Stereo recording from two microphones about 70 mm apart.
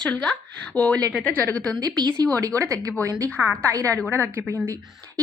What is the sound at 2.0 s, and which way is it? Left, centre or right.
Speech, right.